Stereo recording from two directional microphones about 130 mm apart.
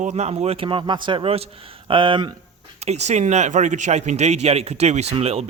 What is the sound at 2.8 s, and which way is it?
A man's voice, 60° right (ahead or behind).